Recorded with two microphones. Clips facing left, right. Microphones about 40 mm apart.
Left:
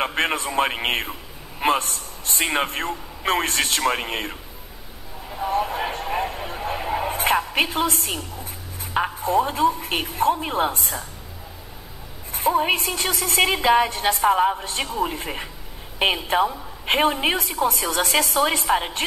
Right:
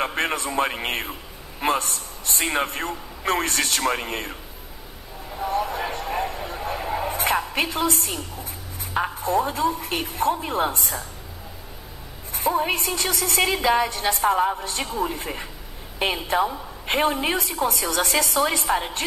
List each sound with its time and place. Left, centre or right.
0.0 s a sound: centre
0.5 s a woman's voice: centre
5.3 s a sound: centre
7.7 s a woman's voice: left
9.2 s a woman's voice: left
10.7 s a woman's voice: left
12.3 s a sound: left
12.7 s a woman's voice: left
15.0 s a woman's voice: centre
18.7 s a woman's voice: centre